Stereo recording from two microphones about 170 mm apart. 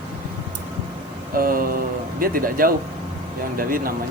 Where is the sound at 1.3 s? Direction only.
55° right (ahead or behind).